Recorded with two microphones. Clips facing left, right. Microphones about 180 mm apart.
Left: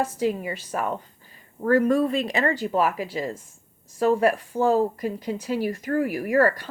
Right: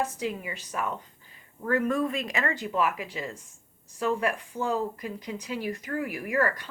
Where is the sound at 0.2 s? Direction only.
40° left (ahead or behind).